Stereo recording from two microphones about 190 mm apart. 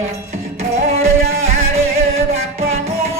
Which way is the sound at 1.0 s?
90° right.